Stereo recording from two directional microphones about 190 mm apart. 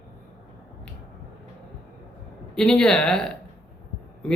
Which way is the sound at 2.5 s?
5° left (ahead or behind).